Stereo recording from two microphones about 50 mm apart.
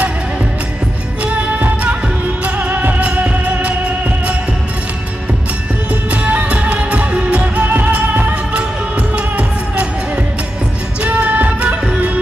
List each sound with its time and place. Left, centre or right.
1.2 s music: right
6.2 s music: right
7.6 s music: right
11.0 s music: right